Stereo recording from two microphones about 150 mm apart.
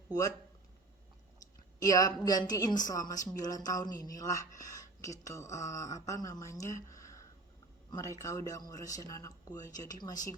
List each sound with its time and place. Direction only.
0.1 s speech: 25° left (ahead or behind)
1.8 s speech: 25° left (ahead or behind)
6.8 s a sound: 20° left (ahead or behind)
7.9 s speech: 20° left (ahead or behind)